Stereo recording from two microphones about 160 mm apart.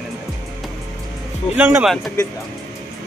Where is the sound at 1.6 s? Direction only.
15° right (ahead or behind).